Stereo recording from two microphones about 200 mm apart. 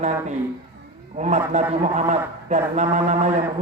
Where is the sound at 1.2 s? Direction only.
35° right (ahead or behind).